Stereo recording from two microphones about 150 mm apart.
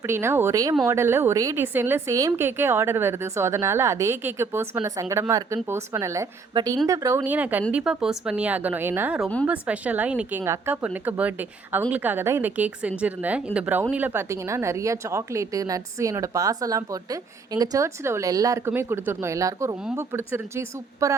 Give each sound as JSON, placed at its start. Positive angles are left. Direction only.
{"t": 0.1, "sound": "a woman's voice", "side_deg": -15}
{"t": 6.5, "sound": "speech", "side_deg": -30}
{"t": 7.3, "sound": "a woman's voice", "side_deg": -10}